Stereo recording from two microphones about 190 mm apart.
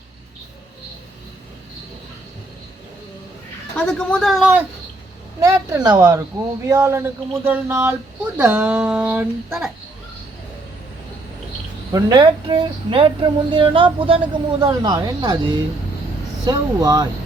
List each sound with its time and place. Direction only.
3.8 s speech: 5° left (ahead or behind)
5.4 s speech: 15° right (ahead or behind)
11.9 s speech: 20° right (ahead or behind)